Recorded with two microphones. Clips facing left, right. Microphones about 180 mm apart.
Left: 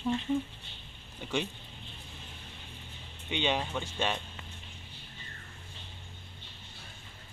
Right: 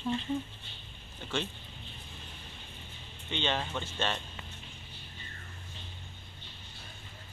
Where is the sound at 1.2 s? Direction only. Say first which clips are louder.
Left 2 dB; 10° left (ahead or behind).